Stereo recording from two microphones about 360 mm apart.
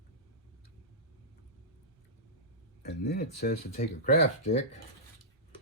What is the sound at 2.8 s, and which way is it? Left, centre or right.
Speech, left.